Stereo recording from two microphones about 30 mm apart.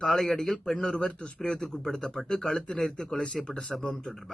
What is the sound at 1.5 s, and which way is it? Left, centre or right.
Speech, centre.